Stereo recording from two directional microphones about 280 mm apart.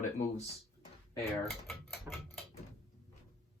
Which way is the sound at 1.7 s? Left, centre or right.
Centre.